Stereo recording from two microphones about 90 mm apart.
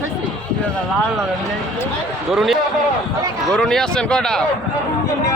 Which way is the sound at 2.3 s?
5° right (ahead or behind).